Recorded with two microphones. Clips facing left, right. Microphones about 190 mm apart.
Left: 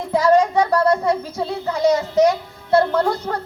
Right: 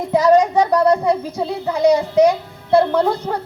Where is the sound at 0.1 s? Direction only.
15° right (ahead or behind).